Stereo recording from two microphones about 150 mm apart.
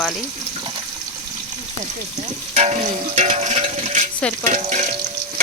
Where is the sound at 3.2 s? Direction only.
50° right (ahead or behind).